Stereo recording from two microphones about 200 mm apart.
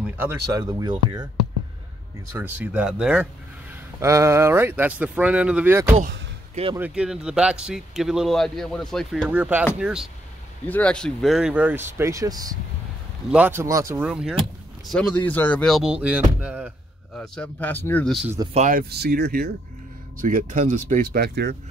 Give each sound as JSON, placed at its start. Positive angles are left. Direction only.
{"t": 0.0, "sound": "speech", "side_deg": -10}
{"t": 2.3, "sound": "speech", "side_deg": -10}
{"t": 4.0, "sound": "speech", "side_deg": -15}
{"t": 6.5, "sound": "speech", "side_deg": -25}
{"t": 6.8, "sound": "speech", "side_deg": -5}
{"t": 10.7, "sound": "speech", "side_deg": 5}
{"t": 17.1, "sound": "speech", "side_deg": 5}
{"t": 18.5, "sound": "speech", "side_deg": -40}
{"t": 20.2, "sound": "speech", "side_deg": -40}